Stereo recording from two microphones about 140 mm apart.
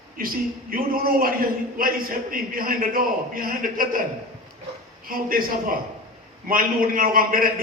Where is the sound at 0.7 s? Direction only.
90° right.